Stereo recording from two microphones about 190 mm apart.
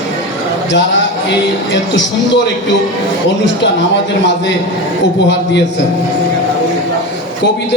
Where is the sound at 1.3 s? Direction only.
70° left (ahead or behind).